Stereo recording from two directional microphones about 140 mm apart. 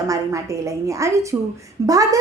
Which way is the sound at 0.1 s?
25° right (ahead or behind).